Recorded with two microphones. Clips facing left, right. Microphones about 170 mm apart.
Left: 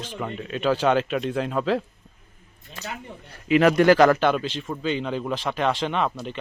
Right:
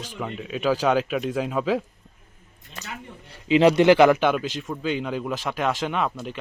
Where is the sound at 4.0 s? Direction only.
10° right (ahead or behind).